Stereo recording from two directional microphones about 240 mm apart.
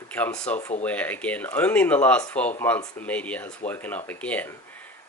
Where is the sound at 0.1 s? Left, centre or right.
Centre.